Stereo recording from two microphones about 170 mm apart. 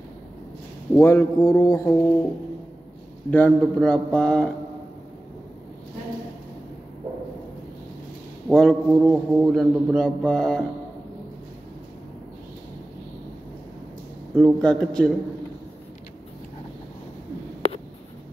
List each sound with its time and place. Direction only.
0.9 s a sound: 20° left (ahead or behind)
3.3 s a man's voice: 10° left (ahead or behind)
8.5 s a man's voice: centre (ahead or behind)
14.3 s a man's voice: centre (ahead or behind)